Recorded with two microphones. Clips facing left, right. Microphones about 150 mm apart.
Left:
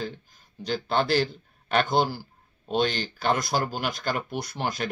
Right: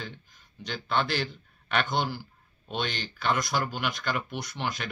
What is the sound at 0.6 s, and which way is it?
Speech, 35° left (ahead or behind).